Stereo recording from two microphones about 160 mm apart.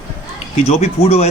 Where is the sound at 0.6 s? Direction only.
40° left (ahead or behind).